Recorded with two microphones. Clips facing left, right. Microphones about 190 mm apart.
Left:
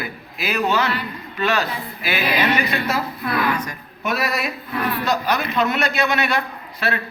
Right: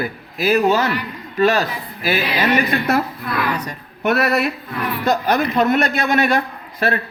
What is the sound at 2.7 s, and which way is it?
Speech, 60° right (ahead or behind).